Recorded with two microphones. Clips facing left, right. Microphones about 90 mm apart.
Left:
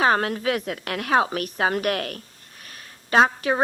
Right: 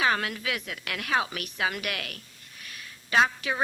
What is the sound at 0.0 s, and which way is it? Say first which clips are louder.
A woman's voice: left 6 dB; 40° left (ahead or behind).